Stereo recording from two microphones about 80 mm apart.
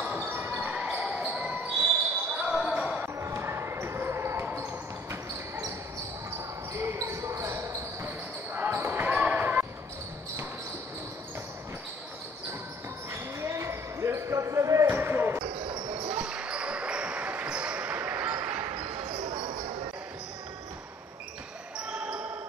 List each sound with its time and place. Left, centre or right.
0.0 s basketball bounce: right
3.2 s basketball bounce: right
9.0 s basketball bounce: centre
13.1 s basketball bounce: right
15.0 s basketball bounce: right
15.4 s basketball bounce: right
16.3 s basketball bounce: centre
19.0 s basketball bounce: right
21.7 s basketball bounce: centre